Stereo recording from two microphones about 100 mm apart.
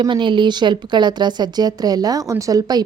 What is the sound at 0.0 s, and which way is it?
A woman's voice, 55° right (ahead or behind).